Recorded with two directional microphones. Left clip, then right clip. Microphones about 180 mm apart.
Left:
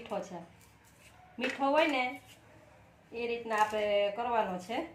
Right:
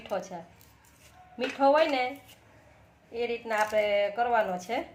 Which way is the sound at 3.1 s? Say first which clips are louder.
Right 2 dB; 50° right (ahead or behind).